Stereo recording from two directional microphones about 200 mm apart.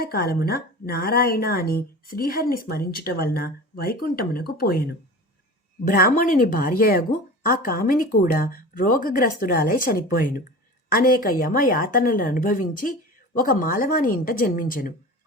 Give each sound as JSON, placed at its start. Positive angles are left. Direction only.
{"t": 0.0, "sound": "a woman's voice", "side_deg": 50}